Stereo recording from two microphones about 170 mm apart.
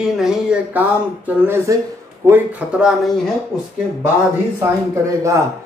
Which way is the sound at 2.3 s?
5° right (ahead or behind).